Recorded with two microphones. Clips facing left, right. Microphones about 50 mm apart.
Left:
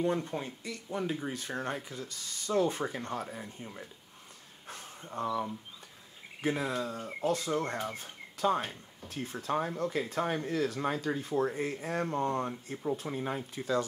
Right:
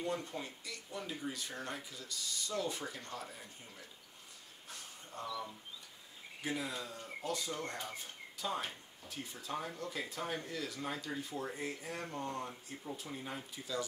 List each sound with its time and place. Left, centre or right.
0.0 s speech: left
4.6 s a sound: left
6.4 s speech: left